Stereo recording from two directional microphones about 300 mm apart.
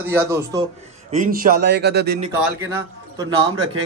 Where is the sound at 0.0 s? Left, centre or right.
Centre.